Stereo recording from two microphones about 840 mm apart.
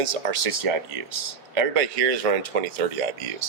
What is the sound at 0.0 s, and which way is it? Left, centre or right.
Speech, right.